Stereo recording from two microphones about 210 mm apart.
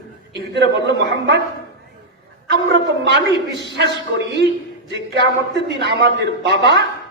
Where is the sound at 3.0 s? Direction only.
55° right (ahead or behind).